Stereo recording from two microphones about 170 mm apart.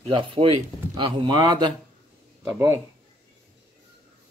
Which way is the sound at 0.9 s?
30° right (ahead or behind).